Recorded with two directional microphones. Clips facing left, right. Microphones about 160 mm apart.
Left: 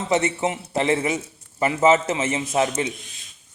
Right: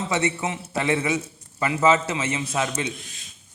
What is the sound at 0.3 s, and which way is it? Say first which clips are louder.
A man's voice: left 4 dB; 25° left (ahead or behind).